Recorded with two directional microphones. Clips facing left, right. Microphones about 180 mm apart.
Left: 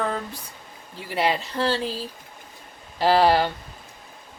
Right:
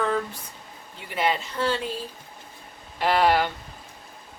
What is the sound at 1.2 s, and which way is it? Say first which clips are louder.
Speech: left 2 dB; 35° left (ahead or behind).